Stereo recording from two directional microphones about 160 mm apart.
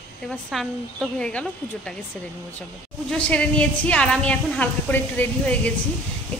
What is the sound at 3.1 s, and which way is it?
A woman's voice, 5° left (ahead or behind).